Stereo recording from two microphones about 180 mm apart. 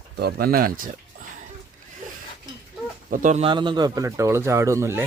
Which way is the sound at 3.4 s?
25° right (ahead or behind).